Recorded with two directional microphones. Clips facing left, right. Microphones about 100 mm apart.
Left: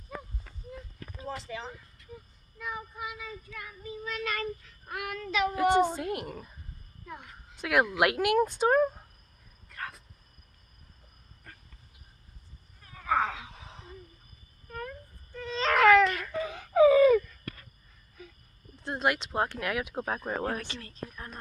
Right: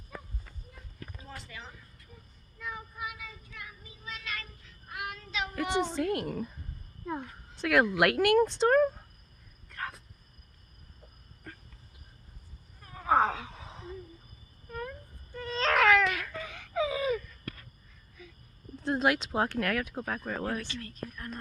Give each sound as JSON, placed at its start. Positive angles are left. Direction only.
{"t": 1.3, "sound": "a sound", "side_deg": 90}
{"t": 2.6, "sound": "child singing", "side_deg": 15}
{"t": 3.0, "sound": "child singing", "side_deg": 30}
{"t": 3.6, "sound": "child singing", "side_deg": 55}
{"t": 5.8, "sound": "speech", "side_deg": 10}
{"t": 7.0, "sound": "a sound", "side_deg": -35}
{"t": 7.5, "sound": "speech", "side_deg": 5}
{"t": 9.6, "sound": "cricket", "side_deg": 0}
{"t": 13.1, "sound": "a sound", "side_deg": -35}
{"t": 15.4, "sound": "baby cry", "side_deg": 0}
{"t": 16.3, "sound": "wail", "side_deg": 25}
{"t": 16.7, "sound": "a sound", "side_deg": 50}
{"t": 18.8, "sound": "speech", "side_deg": 0}
{"t": 19.8, "sound": "a woman's voice", "side_deg": 20}